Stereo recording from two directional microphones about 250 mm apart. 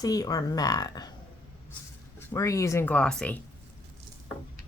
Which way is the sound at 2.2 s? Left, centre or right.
Centre.